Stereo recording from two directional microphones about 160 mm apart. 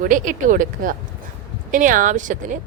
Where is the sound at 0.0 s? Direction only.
55° right (ahead or behind).